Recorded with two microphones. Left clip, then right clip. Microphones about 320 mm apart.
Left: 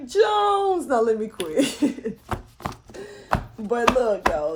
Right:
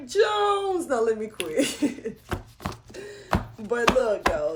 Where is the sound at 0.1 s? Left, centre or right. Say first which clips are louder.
Left 3 dB; centre.